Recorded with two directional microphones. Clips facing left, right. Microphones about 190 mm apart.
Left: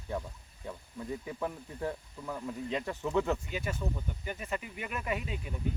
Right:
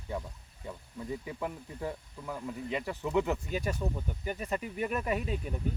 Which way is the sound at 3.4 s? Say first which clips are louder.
Right 3 dB; 40° right (ahead or behind).